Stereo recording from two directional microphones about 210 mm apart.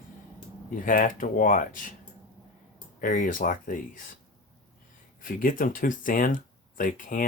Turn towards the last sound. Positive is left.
turn(degrees=40)  # may be behind; listen again after turning